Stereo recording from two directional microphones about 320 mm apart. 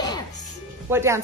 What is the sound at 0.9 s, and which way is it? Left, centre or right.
Speech, centre.